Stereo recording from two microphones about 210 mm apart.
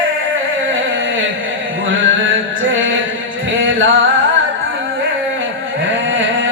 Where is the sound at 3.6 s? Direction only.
65° right (ahead or behind).